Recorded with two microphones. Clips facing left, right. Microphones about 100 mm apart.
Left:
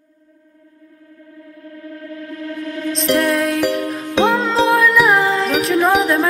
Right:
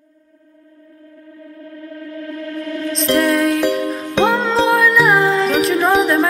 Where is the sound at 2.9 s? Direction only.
Centre (ahead or behind).